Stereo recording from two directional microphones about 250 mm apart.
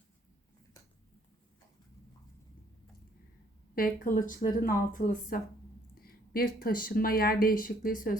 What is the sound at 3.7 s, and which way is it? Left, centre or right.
Speech, left.